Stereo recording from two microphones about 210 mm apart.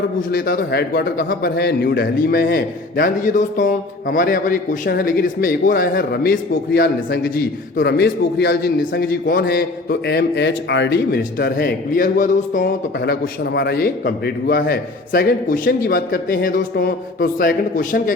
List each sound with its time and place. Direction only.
0.2 s a man's voice: 45° left (ahead or behind)